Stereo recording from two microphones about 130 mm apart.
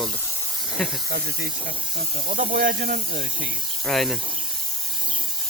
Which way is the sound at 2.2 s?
90° right.